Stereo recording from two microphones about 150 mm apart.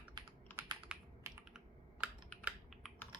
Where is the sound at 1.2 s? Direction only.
20° right (ahead or behind).